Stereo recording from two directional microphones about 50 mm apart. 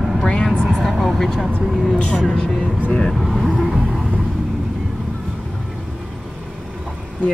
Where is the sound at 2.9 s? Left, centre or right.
Centre.